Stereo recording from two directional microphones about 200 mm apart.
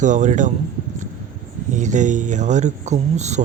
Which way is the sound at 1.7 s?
40° right (ahead or behind).